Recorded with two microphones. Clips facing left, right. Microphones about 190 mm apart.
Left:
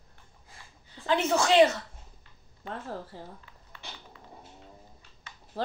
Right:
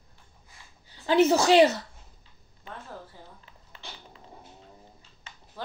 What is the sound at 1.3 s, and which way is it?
Speech, 35° right (ahead or behind).